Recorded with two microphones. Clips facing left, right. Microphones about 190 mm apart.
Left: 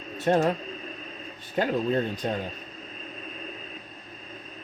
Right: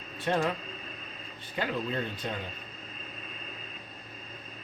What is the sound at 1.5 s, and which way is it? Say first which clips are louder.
Speech: left 7 dB; 45° left (ahead or behind).